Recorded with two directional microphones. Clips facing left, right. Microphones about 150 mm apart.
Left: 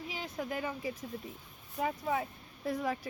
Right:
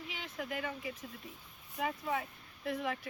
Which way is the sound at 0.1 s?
35° left (ahead or behind).